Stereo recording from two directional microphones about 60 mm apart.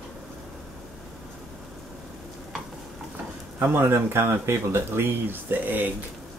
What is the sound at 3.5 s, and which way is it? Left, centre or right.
Speech, right.